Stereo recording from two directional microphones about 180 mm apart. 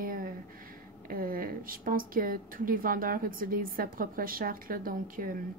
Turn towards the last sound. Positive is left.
turn(degrees=-50)  # may be behind; listen again after turning